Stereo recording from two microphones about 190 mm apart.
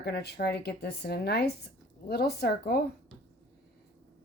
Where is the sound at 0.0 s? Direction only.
60° left (ahead or behind).